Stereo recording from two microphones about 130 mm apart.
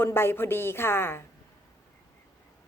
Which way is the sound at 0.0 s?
20° left (ahead or behind).